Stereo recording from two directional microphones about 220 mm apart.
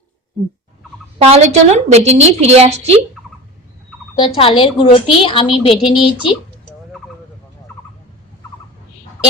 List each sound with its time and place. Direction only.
1.2 s a woman's voice: 30° right (ahead or behind)
4.4 s a woman's voice: 25° left (ahead or behind)